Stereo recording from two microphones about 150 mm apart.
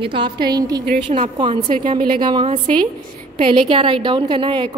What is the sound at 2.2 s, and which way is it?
A woman's voice, 35° right (ahead or behind).